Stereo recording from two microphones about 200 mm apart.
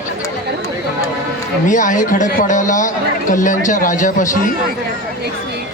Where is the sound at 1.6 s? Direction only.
40° left (ahead or behind).